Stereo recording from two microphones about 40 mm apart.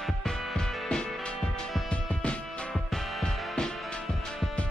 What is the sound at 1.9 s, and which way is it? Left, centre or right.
Music, left.